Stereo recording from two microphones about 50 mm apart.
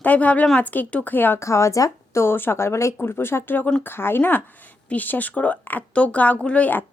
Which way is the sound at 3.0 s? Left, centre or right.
Left.